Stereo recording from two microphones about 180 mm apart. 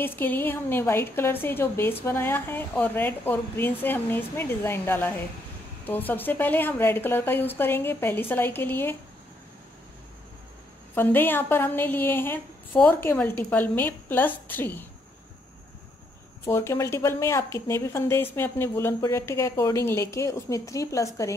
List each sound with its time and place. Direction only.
0.0 s speech: 10° left (ahead or behind)
11.0 s speech: 10° left (ahead or behind)
16.4 s speech: 15° left (ahead or behind)